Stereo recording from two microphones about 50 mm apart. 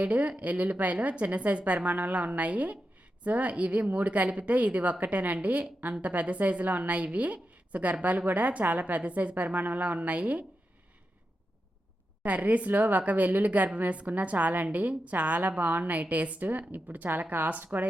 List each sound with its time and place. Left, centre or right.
0.0 s a woman's voice: right
12.2 s a woman's voice: right